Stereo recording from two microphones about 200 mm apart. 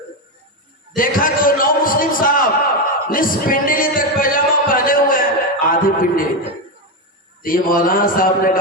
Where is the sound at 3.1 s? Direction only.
45° left (ahead or behind).